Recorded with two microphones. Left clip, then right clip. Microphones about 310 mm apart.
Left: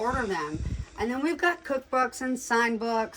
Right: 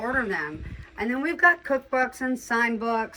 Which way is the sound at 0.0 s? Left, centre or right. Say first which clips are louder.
Right 2 dB; centre.